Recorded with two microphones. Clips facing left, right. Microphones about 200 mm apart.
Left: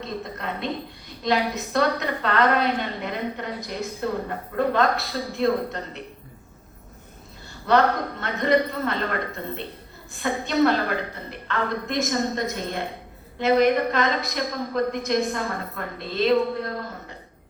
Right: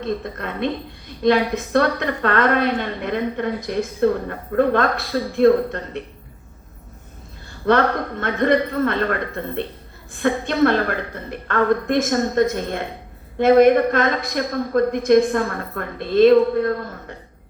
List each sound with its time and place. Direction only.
0.0 s a woman's voice: 50° right (ahead or behind)
7.6 s a woman's voice: 50° right (ahead or behind)
10.2 s a woman's voice: 55° right (ahead or behind)